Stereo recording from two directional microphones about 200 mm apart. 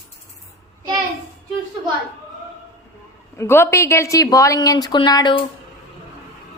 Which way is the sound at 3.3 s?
10° left (ahead or behind).